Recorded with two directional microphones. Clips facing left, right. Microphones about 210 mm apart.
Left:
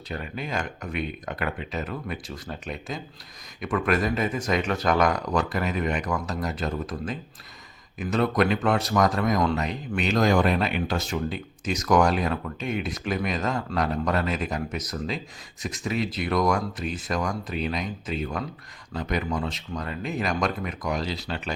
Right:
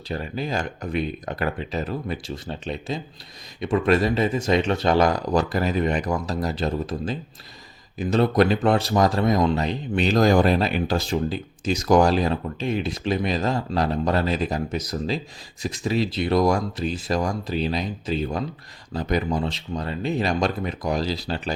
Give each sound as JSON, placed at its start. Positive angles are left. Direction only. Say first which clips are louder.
{"t": 0.1, "sound": "speech", "louder": "right 4 dB", "side_deg": -35}